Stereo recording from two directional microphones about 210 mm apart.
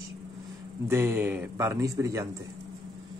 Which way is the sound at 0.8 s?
10° right (ahead or behind).